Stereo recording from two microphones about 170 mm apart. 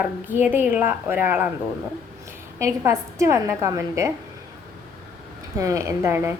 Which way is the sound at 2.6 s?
15° right (ahead or behind).